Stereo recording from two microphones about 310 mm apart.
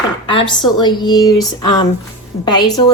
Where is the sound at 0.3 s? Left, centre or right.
Centre.